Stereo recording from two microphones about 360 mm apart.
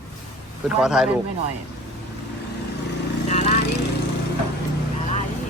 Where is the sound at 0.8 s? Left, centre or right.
Centre.